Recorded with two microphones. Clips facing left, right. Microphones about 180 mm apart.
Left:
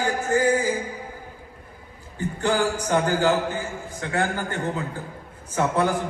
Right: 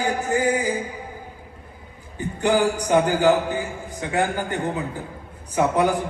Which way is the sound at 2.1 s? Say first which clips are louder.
Right 3 dB; 15° right (ahead or behind).